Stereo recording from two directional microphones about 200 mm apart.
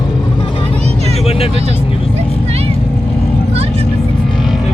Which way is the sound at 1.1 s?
30° left (ahead or behind).